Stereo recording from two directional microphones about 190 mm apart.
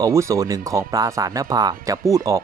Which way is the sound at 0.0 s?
15° right (ahead or behind).